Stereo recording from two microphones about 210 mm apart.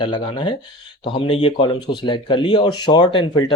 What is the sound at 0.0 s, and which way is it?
Speech, 20° left (ahead or behind).